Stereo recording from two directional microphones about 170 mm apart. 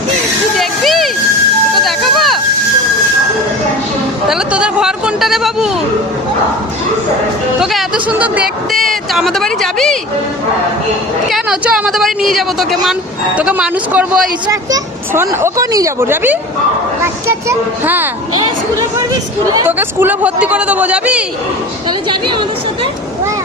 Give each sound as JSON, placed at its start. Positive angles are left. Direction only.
{"t": 0.6, "sound": "a sound", "side_deg": 0}
{"t": 4.3, "sound": "a sound", "side_deg": -5}
{"t": 7.6, "sound": "speech", "side_deg": 0}
{"t": 11.3, "sound": "speech", "side_deg": -5}
{"t": 14.4, "sound": "a child's voice", "side_deg": -20}
{"t": 19.5, "sound": "a child's voice", "side_deg": -10}
{"t": 21.8, "sound": "a woman's voice", "side_deg": -25}